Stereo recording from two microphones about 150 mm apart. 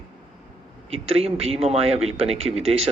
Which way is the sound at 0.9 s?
40° right (ahead or behind).